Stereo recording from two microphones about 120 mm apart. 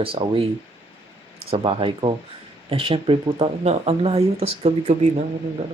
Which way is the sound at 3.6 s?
60° right (ahead or behind).